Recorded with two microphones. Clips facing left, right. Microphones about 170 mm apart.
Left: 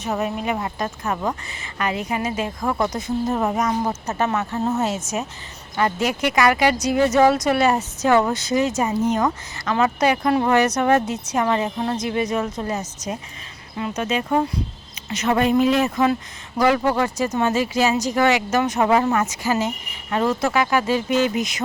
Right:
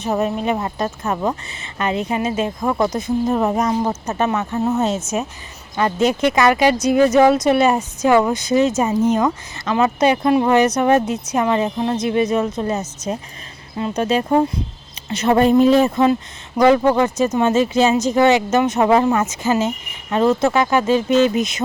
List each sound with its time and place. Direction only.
0.2 s speech: 30° right (ahead or behind)
3.5 s speech: 30° right (ahead or behind)